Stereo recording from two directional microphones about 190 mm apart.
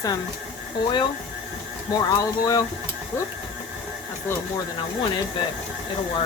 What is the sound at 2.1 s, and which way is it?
Speech, 20° left (ahead or behind).